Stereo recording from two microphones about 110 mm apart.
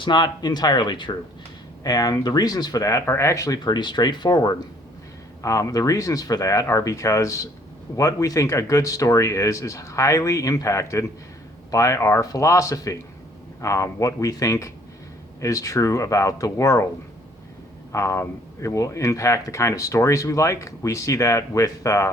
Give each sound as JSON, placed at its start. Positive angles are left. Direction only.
{"t": 0.0, "sound": "speech", "side_deg": 45}
{"t": 17.9, "sound": "speech", "side_deg": 25}